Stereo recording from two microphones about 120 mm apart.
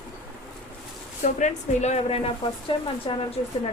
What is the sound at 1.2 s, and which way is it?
Speech, 90° left.